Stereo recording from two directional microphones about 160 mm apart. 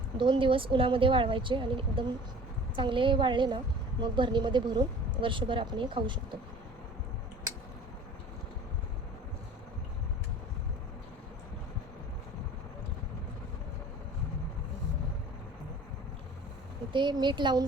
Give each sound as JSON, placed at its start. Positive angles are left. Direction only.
{"t": 0.2, "sound": "speech", "side_deg": -30}
{"t": 16.9, "sound": "a woman's voice", "side_deg": -30}